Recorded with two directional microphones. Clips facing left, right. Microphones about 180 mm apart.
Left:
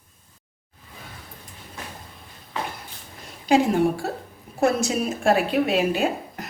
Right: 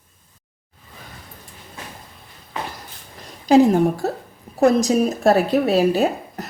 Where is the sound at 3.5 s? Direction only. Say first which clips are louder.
Right 5 dB; 40° right (ahead or behind).